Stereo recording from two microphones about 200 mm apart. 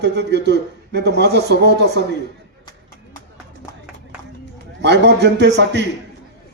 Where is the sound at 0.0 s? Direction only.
55° right (ahead or behind).